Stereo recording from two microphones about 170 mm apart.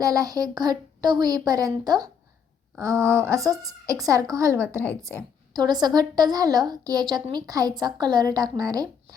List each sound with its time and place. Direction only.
0.0 s a woman's voice: 20° right (ahead or behind)